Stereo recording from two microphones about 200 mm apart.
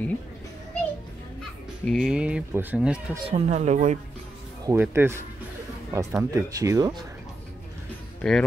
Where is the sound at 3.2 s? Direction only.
30° right (ahead or behind).